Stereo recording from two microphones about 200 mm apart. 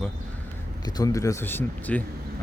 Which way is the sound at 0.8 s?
20° left (ahead or behind).